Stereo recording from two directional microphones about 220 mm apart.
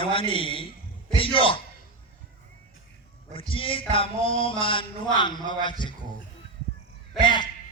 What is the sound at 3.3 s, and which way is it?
Speech, 25° left (ahead or behind).